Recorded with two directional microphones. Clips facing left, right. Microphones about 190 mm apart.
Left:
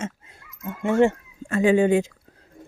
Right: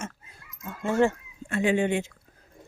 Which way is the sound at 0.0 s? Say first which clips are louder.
Left 6 dB; 20° left (ahead or behind).